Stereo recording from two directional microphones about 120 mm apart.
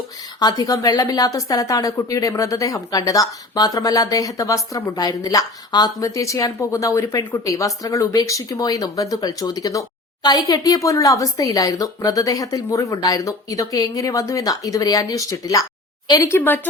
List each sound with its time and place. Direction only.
0.3 s speech: 35° left (ahead or behind)